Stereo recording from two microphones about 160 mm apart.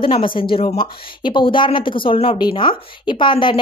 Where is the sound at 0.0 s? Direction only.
35° left (ahead or behind).